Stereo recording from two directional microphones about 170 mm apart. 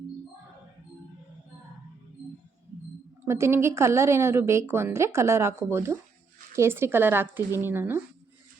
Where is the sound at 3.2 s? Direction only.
15° right (ahead or behind).